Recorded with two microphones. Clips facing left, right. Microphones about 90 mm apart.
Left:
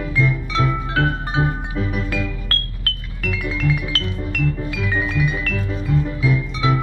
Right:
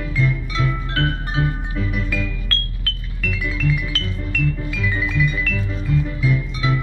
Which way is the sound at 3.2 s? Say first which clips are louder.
Left 1 dB; 50° left (ahead or behind).